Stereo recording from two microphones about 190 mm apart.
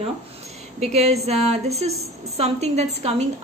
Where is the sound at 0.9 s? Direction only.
35° right (ahead or behind).